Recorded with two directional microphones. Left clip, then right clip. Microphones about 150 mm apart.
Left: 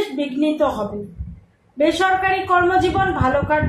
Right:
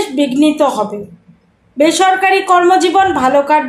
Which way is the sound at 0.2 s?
75° right (ahead or behind).